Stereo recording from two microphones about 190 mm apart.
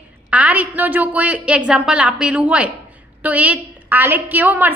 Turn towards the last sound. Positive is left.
turn(degrees=-10)  # may be behind; listen again after turning